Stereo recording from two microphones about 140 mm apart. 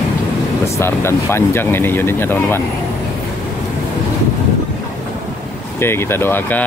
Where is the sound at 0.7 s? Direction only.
20° left (ahead or behind).